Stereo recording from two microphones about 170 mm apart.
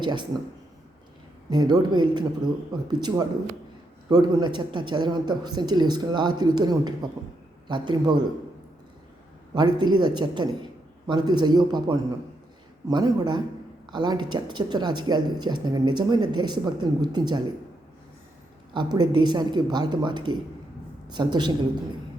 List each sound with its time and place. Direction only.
0.0 s speech: 25° right (ahead or behind)
1.5 s speech: 25° right (ahead or behind)
9.6 s speech: 25° right (ahead or behind)
18.7 s speech: 25° right (ahead or behind)